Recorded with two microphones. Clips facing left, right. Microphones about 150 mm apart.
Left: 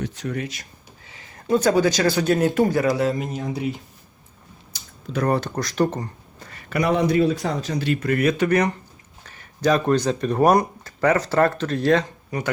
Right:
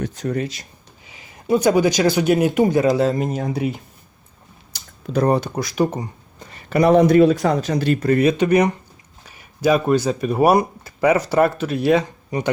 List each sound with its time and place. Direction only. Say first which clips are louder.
0.0 s speech: right 4 dB; 45° right (ahead or behind)
1.0 s speech: right 3 dB; 15° right (ahead or behind)
3.2 s speech: right 5 dB; 45° right (ahead or behind)
5.3 s speech: right 3 dB; 10° right (ahead or behind)
6.8 s speech: right 7 dB; 45° right (ahead or behind)
7.4 s speech: right 7 dB; 65° right (ahead or behind)
7.8 s speech: right 4 dB; 45° right (ahead or behind)
8.1 s speech: right 4 dB; 20° right (ahead or behind)